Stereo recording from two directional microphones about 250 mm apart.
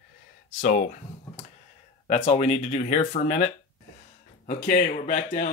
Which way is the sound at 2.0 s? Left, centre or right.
Left.